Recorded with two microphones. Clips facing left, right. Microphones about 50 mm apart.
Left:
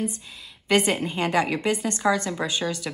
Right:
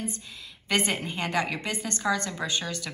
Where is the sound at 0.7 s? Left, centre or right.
Left.